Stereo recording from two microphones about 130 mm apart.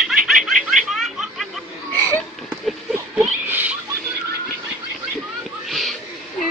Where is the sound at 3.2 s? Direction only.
15° right (ahead or behind).